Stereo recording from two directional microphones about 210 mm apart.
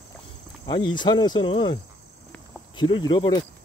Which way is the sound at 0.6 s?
20° left (ahead or behind).